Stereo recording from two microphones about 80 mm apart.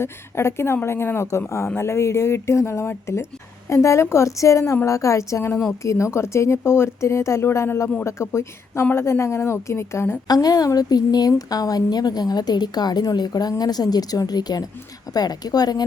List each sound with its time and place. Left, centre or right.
0.0 s speech: left
10.2 s a woman's voice: left